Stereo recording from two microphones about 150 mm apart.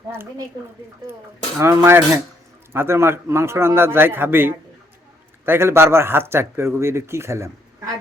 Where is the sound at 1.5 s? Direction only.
15° right (ahead or behind).